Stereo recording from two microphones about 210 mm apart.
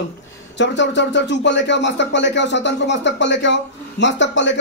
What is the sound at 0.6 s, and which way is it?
Speech, 60° left (ahead or behind).